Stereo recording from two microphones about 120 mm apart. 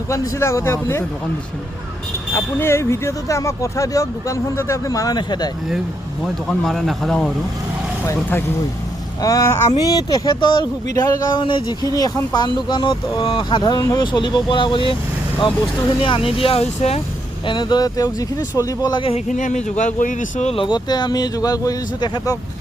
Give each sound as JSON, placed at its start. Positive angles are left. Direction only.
{"t": 0.1, "sound": "speech", "side_deg": 25}
{"t": 2.3, "sound": "speech", "side_deg": 20}
{"t": 6.5, "sound": "speech", "side_deg": 0}
{"t": 8.0, "sound": "speech", "side_deg": 20}
{"t": 11.9, "sound": "speech", "side_deg": 30}
{"t": 16.0, "sound": "speech", "side_deg": 50}
{"t": 17.4, "sound": "speech", "side_deg": 40}
{"t": 19.1, "sound": "speech", "side_deg": 90}
{"t": 20.6, "sound": "speech", "side_deg": 40}